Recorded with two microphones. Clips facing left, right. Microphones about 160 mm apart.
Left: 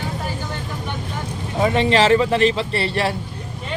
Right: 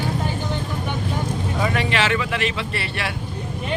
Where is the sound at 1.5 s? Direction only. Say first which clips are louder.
Left 7 dB; 25° left (ahead or behind).